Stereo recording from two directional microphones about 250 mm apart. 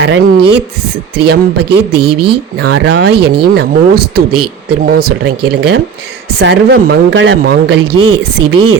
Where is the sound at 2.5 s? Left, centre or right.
Right.